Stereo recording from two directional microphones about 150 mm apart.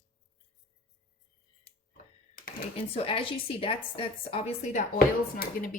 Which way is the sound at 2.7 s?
40° left (ahead or behind).